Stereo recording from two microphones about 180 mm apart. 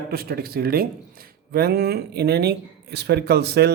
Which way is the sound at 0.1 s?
55° right (ahead or behind).